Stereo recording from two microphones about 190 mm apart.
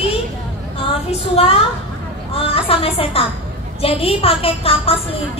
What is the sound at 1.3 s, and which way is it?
A woman's voice, 30° left (ahead or behind).